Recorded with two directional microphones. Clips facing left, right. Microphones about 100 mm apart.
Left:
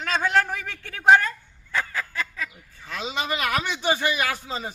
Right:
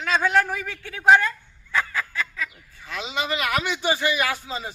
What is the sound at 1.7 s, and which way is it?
Fowl, 40° left (ahead or behind).